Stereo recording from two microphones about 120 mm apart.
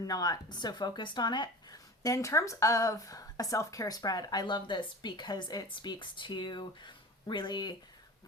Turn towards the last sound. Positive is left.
turn(degrees=40)  # may be behind; listen again after turning